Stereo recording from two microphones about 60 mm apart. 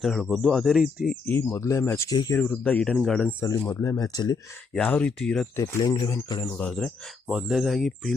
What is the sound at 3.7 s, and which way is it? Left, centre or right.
Speech, left.